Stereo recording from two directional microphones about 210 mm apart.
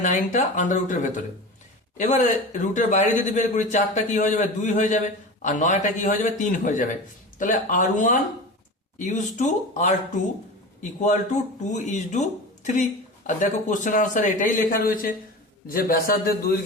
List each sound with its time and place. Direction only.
0.0 s speech: 35° left (ahead or behind)
11.0 s a man's voice: 35° left (ahead or behind)